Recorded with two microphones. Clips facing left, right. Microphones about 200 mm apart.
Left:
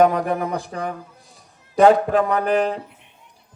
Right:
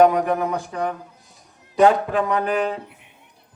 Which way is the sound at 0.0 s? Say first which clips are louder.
Right 1 dB; 40° left (ahead or behind).